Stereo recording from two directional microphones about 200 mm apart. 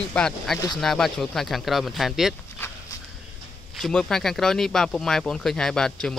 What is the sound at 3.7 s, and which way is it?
Speech, centre (ahead or behind).